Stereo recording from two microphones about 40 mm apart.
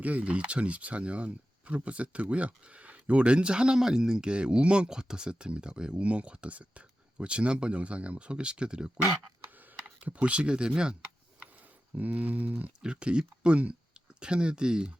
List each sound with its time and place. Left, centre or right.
0.0 s speech: right
9.6 s typing: right
10.1 s speech: right
11.9 s speech: right
12.8 s speech: right